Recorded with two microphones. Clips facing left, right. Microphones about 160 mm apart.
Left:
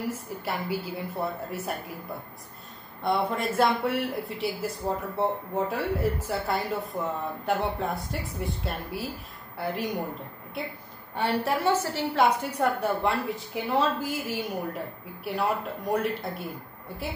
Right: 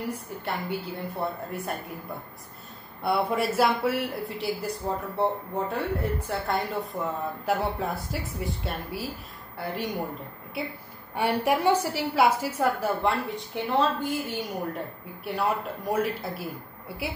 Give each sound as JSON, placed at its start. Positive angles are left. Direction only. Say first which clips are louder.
{"t": 0.5, "sound": "speech", "louder": "even", "side_deg": 0}
{"t": 3.0, "sound": "speech", "louder": "right 1 dB", "side_deg": -5}